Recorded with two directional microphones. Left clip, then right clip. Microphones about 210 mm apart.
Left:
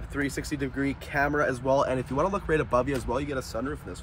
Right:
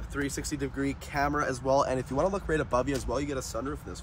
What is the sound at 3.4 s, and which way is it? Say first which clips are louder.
Speech: left 2 dB; 55° left (ahead or behind).